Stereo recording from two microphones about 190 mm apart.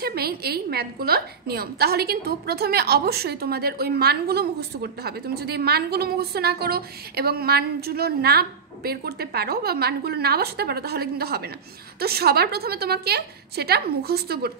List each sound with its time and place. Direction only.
0.0 s a woman's voice: 55° right (ahead or behind)